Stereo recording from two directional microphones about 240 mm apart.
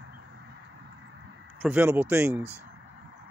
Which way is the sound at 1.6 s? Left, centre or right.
Centre.